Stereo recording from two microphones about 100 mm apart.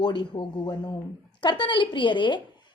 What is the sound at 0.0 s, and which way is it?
A woman's voice, 50° left (ahead or behind).